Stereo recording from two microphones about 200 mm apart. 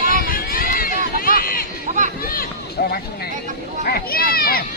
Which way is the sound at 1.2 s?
45° left (ahead or behind).